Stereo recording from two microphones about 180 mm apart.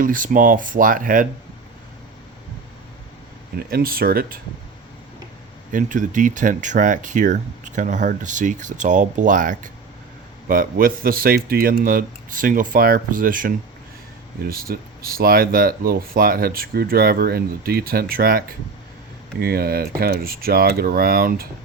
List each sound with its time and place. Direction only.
0.0 s speech: 50° right (ahead or behind)
3.7 s speech: 55° right (ahead or behind)
5.7 s speech: 45° right (ahead or behind)